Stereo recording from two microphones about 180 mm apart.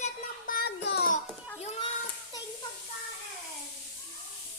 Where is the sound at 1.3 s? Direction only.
10° left (ahead or behind).